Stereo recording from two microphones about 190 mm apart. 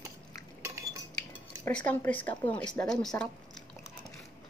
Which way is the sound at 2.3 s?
25° left (ahead or behind).